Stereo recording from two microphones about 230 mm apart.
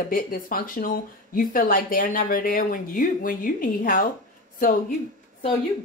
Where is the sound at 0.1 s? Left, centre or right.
Left.